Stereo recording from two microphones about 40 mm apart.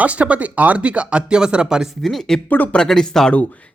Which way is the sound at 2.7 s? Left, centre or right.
Centre.